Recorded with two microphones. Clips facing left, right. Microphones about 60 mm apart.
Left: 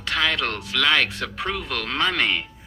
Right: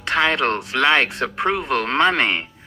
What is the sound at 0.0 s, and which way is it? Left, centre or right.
Speech, right.